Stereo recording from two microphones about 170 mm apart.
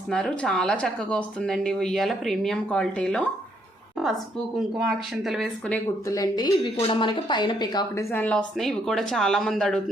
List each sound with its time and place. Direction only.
0.1 s speech: 5° left (ahead or behind)
4.9 s speech: centre (ahead or behind)
6.1 s speech: 20° left (ahead or behind)
8.1 s speech: 10° left (ahead or behind)